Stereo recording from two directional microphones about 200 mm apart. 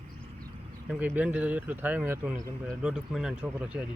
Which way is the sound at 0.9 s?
10° right (ahead or behind).